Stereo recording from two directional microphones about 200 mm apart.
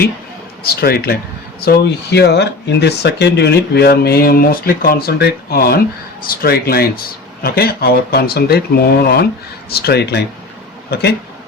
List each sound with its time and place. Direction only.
0.6 s speech: 50° left (ahead or behind)